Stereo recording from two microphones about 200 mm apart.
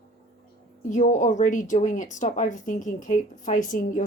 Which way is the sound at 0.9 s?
40° left (ahead or behind).